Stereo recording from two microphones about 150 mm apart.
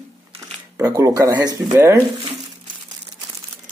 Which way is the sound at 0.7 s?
20° right (ahead or behind).